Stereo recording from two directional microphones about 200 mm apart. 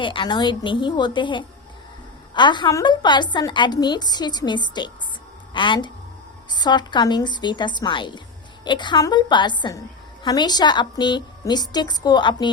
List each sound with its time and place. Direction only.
0.0 s a woman's voice: 25° left (ahead or behind)